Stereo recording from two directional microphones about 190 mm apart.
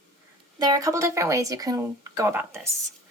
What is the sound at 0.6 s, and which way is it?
Speech, 20° right (ahead or behind).